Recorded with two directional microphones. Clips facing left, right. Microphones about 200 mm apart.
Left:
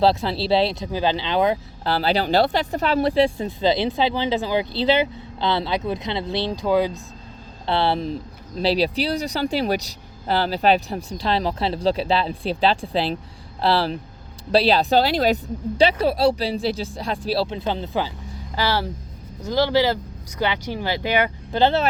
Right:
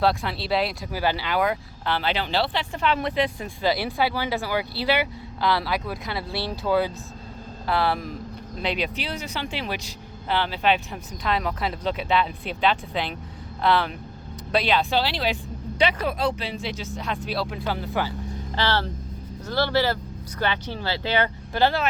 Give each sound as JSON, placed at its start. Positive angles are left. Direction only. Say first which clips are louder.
{"t": 0.0, "sound": "speech", "louder": "left 5 dB", "side_deg": 25}
{"t": 1.8, "sound": "speech", "louder": "left 5 dB", "side_deg": 35}
{"t": 7.7, "sound": "speech", "louder": "left 3 dB", "side_deg": 30}
{"t": 15.8, "sound": "speech", "louder": "left 6 dB", "side_deg": 30}